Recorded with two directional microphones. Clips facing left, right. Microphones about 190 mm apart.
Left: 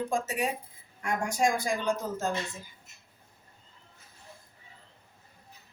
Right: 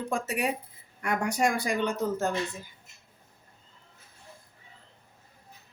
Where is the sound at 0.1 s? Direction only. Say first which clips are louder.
Right 1 dB; 65° right (ahead or behind).